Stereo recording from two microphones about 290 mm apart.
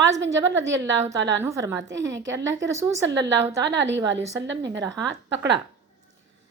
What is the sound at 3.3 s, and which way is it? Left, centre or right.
Speech, centre.